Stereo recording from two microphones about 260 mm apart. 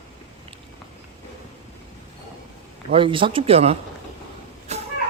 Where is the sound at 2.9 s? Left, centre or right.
Centre.